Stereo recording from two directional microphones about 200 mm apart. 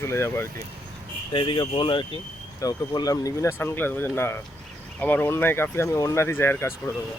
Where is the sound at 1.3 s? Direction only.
25° left (ahead or behind).